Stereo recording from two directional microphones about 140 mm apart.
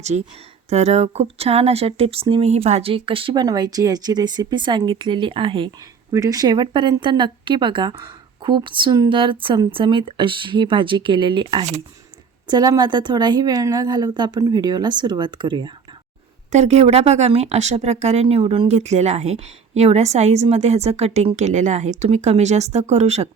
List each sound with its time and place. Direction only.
0.1 s speech: 55° right (ahead or behind); by 6.1 s 35° right (ahead or behind)
6.1 s speech: 25° right (ahead or behind)
16.5 s speech: 55° right (ahead or behind)